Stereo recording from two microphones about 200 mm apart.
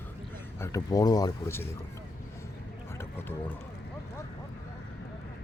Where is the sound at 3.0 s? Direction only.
10° left (ahead or behind).